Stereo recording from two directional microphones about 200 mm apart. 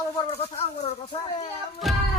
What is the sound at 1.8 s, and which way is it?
Music, centre (ahead or behind).